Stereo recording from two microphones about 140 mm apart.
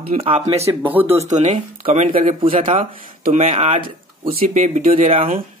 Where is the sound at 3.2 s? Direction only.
60° right (ahead or behind); by 4.5 s 45° right (ahead or behind).